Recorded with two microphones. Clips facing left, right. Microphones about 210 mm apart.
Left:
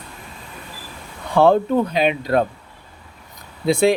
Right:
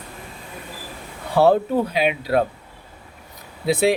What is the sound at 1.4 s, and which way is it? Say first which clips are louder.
Speech: left 2 dB; 5° right (ahead or behind).